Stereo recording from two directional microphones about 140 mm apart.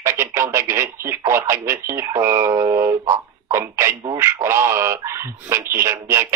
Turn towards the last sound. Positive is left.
turn(degrees=-20)  # may be behind; listen again after turning